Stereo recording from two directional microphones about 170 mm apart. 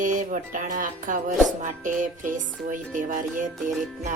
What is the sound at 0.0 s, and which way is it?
Music, 50° right (ahead or behind).